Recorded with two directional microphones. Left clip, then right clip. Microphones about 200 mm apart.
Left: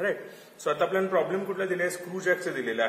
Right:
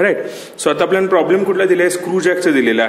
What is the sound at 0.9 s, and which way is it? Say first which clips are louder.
A man's voice: right 13 dB; 45° right (ahead or behind).